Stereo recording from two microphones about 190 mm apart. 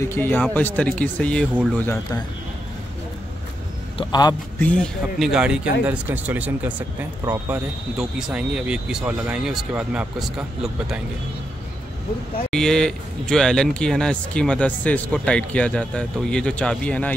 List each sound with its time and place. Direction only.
0.1 s speech: 10° left (ahead or behind)
1.5 s speech: 5° right (ahead or behind)
1.8 s speech: 10° left (ahead or behind)
4.0 s a man's voice: 20° left (ahead or behind)
4.6 s speech: 5° left (ahead or behind)
12.4 s speech: 5° left (ahead or behind)